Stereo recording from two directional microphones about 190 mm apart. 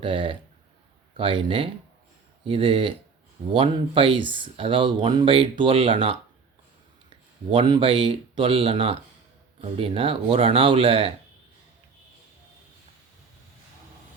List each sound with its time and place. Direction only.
0.0 s speech: 25° right (ahead or behind)
7.7 s speech: 25° right (ahead or behind)